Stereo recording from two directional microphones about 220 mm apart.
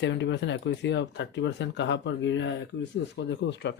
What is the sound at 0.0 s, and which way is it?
Speech, 55° left (ahead or behind).